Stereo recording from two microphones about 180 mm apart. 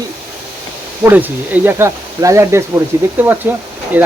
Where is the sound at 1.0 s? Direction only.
10° right (ahead or behind).